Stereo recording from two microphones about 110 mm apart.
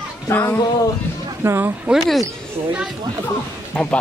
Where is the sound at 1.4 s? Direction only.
25° right (ahead or behind).